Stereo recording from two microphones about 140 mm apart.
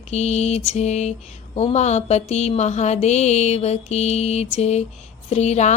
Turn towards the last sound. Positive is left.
turn(degrees=50)  # may be behind; listen again after turning